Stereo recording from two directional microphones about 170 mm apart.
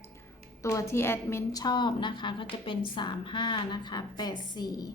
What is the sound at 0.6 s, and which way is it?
A woman's voice, 20° left (ahead or behind).